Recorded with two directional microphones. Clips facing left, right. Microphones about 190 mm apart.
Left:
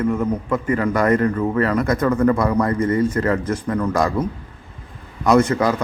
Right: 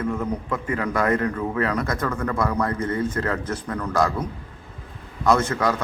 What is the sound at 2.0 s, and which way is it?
Speech, 15° left (ahead or behind).